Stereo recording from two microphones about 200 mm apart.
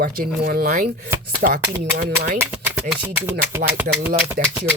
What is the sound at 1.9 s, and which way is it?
Speech, 50° right (ahead or behind).